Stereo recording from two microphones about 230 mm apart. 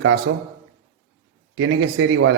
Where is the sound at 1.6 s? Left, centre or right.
Right.